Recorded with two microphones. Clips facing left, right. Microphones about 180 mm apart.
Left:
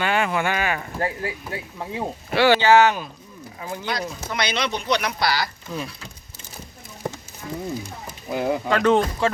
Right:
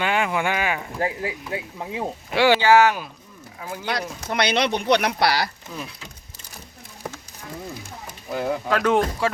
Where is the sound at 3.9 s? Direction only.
60° right (ahead or behind).